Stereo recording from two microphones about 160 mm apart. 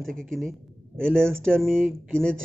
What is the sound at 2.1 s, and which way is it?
Speech, 5° left (ahead or behind).